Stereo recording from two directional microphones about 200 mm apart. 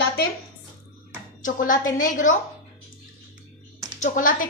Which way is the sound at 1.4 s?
40° left (ahead or behind).